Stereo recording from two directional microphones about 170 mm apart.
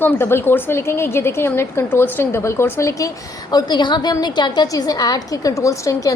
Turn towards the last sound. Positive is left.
turn(degrees=20)  # may be behind; listen again after turning